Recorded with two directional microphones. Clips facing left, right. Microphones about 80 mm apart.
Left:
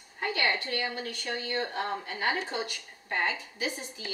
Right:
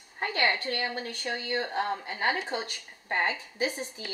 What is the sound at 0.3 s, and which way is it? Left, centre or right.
Speech, right.